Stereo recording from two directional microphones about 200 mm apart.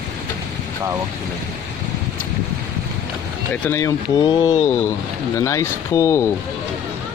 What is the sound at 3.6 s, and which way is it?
Speech, 15° left (ahead or behind).